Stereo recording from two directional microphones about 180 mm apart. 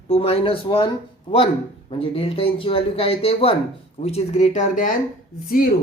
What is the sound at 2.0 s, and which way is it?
Speech, 30° left (ahead or behind).